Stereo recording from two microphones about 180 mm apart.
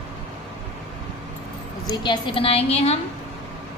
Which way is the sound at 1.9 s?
25° left (ahead or behind).